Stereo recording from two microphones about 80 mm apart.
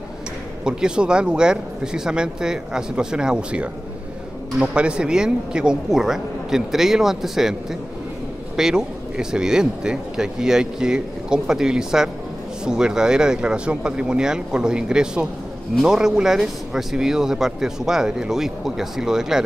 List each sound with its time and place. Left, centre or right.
0.7 s speech: centre
8.5 s speech: centre